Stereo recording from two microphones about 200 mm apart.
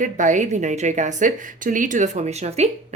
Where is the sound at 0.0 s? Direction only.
40° right (ahead or behind).